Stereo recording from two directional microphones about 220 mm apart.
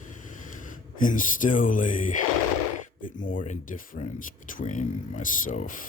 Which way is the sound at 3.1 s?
35° left (ahead or behind).